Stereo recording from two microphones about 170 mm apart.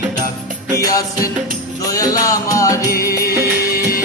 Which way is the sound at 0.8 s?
20° left (ahead or behind).